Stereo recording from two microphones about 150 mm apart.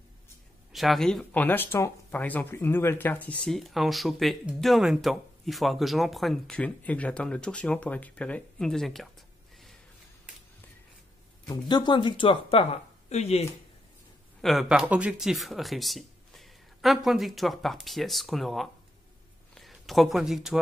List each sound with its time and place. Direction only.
0.7 s speech: centre (ahead or behind)
11.7 s speech: 30° left (ahead or behind)
14.4 s speech: centre (ahead or behind)